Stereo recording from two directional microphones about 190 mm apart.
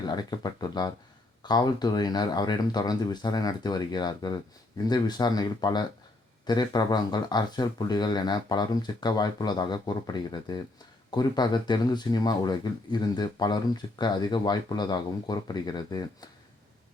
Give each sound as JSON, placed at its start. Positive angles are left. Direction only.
{"t": 0.1, "sound": "speech", "side_deg": 20}